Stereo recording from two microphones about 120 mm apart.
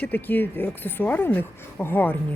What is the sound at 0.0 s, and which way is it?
Speech, 15° left (ahead or behind).